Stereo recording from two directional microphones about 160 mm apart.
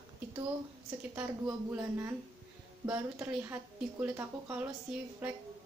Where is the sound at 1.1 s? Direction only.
10° right (ahead or behind).